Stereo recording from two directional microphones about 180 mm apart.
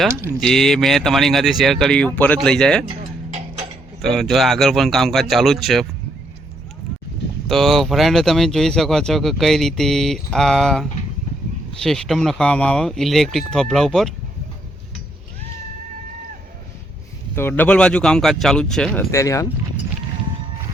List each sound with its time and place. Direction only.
0.1 s speech: 15° right (ahead or behind)
0.3 s speech: centre (ahead or behind)
3.0 s tick-tock: 45° right (ahead or behind)
4.0 s speech: centre (ahead or behind)
7.4 s speech: centre (ahead or behind)
17.3 s speech: 10° left (ahead or behind)
19.1 s speech: 15° left (ahead or behind)